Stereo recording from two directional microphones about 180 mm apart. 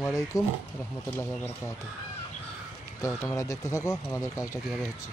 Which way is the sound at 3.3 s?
15° left (ahead or behind).